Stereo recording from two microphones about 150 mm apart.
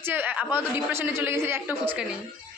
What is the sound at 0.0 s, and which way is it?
A man's voice, 15° right (ahead or behind).